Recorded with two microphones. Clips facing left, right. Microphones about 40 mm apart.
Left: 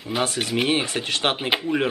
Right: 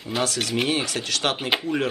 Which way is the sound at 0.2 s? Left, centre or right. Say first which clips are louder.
Left 1 dB; left.